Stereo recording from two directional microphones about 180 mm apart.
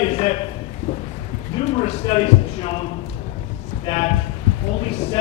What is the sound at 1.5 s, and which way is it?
Speech, 35° left (ahead or behind).